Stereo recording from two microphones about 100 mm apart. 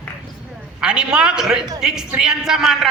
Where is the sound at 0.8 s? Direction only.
10° right (ahead or behind).